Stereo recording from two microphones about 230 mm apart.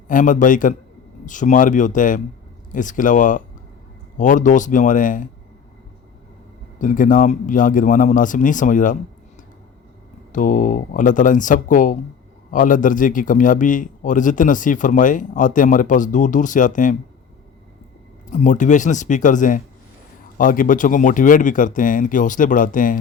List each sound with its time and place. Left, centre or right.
0.1 s a man's voice: left
6.7 s a man's voice: left
10.3 s a man's voice: left
18.3 s a man's voice: left